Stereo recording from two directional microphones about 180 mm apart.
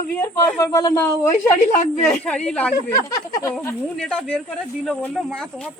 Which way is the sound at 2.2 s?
5° left (ahead or behind).